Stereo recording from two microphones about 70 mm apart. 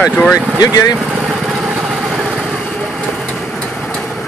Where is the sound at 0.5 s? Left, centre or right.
Left.